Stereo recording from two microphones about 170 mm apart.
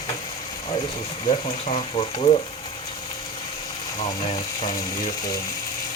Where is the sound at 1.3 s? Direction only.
35° left (ahead or behind).